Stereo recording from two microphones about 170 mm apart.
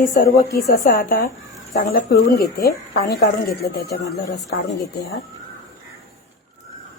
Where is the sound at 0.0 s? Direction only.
60° left (ahead or behind); by 5.2 s 75° left (ahead or behind).